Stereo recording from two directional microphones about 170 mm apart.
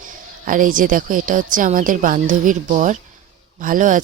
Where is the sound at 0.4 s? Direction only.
50° right (ahead or behind).